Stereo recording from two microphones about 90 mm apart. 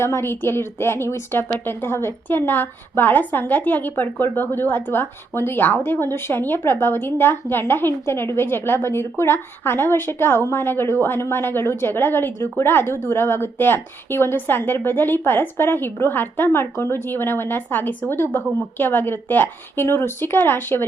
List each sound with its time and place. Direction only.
0.0 s a woman's voice: 30° left (ahead or behind)